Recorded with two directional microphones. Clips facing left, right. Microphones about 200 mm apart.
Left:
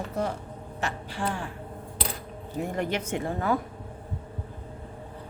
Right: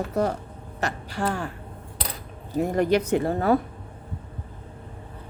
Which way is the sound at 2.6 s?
40° right (ahead or behind).